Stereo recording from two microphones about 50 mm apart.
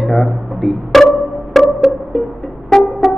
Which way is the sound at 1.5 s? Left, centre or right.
Centre.